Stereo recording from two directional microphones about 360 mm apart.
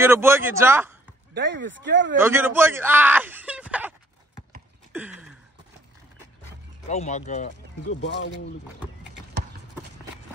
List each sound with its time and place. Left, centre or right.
0.0 s speech: centre
1.3 s speech: right
2.1 s speech: centre
6.9 s speech: centre
7.9 s speech: left